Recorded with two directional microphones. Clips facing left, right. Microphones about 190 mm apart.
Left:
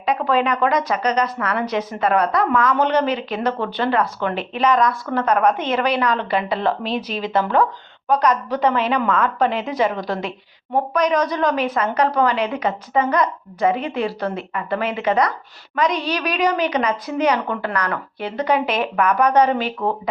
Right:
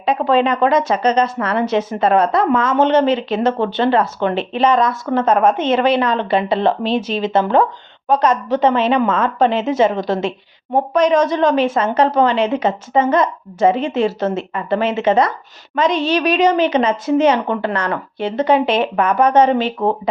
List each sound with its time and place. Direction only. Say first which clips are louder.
0.0 s a woman's voice: right 4 dB; 25° right (ahead or behind)